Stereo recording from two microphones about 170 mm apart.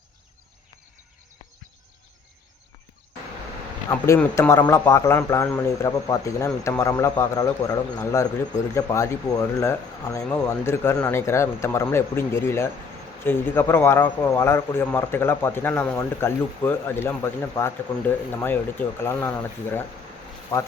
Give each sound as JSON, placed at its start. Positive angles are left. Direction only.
{"t": 3.8, "sound": "a man's voice", "side_deg": 15}